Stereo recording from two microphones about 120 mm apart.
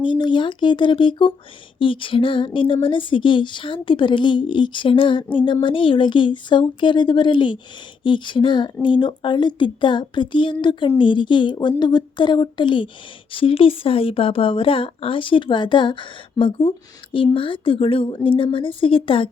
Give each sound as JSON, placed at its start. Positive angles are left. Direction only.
{"t": 0.0, "sound": "a woman's voice", "side_deg": 40}